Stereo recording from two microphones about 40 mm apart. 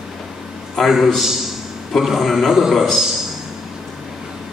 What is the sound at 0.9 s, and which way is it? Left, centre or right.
A man's voice, centre.